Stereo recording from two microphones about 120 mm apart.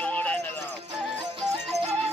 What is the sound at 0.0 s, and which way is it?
Music, 10° left (ahead or behind).